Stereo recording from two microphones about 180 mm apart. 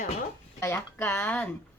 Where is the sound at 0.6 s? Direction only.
15° left (ahead or behind).